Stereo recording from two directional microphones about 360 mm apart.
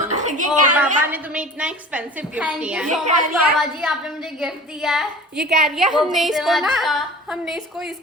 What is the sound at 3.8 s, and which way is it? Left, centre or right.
A woman's voice, centre.